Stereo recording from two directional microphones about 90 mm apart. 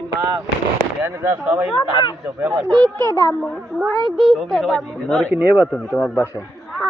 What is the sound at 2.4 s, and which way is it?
Speech, 15° right (ahead or behind).